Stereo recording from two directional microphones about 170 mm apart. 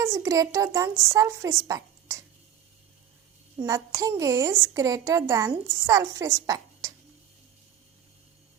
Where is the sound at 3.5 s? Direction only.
20° right (ahead or behind).